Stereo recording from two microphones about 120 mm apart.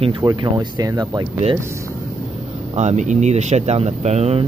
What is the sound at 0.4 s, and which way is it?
Speech, 40° right (ahead or behind).